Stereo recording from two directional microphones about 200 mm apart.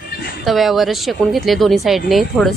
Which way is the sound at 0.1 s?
50° left (ahead or behind).